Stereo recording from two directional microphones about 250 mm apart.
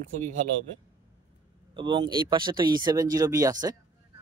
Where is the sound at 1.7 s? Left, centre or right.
Centre.